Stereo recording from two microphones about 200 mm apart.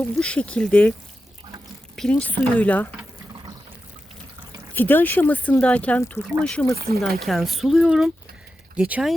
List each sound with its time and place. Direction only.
0.0 s speech: 5° left (ahead or behind)
2.0 s speech: 5° left (ahead or behind)
4.7 s speech: 10° left (ahead or behind)
6.7 s speech: 50° right (ahead or behind)
7.2 s speech: centre (ahead or behind)